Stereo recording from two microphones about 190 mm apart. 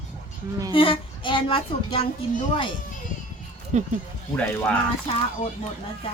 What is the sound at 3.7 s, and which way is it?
Speech, 35° right (ahead or behind).